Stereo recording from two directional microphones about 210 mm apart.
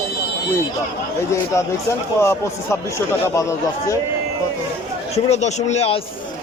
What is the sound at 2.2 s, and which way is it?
A man's voice, 10° left (ahead or behind).